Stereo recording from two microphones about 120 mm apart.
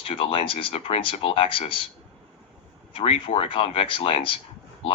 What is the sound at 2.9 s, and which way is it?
Speech, 50° left (ahead or behind).